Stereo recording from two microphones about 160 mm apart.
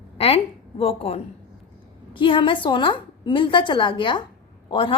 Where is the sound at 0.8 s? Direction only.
40° left (ahead or behind).